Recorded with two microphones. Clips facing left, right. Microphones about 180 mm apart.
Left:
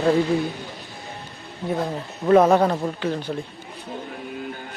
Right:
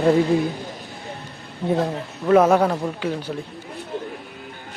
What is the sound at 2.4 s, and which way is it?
Speech, 10° right (ahead or behind).